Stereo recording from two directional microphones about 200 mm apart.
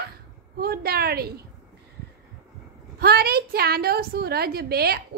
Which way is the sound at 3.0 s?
50° right (ahead or behind).